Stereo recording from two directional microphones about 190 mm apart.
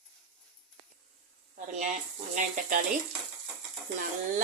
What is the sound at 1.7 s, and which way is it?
Speech, 40° right (ahead or behind).